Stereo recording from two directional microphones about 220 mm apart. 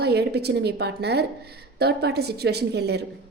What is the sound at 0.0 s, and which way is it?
A woman's voice, 50° right (ahead or behind).